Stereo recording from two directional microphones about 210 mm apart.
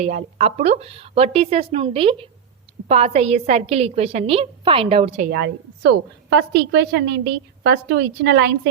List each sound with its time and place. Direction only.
0.0 s a woman's voice: 35° right (ahead or behind)
5.3 s a woman's voice: 50° right (ahead or behind)